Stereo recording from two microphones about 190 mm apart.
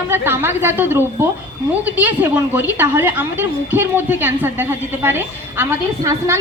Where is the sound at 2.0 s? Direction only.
10° right (ahead or behind).